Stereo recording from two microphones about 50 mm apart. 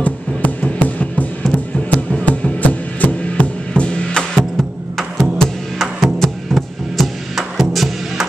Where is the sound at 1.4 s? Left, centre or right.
Centre.